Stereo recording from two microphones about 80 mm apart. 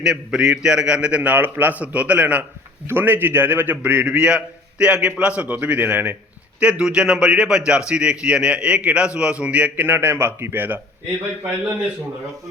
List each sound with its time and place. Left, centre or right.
0.0 s a man's voice: centre; by 6.1 s right
6.6 s a man's voice: centre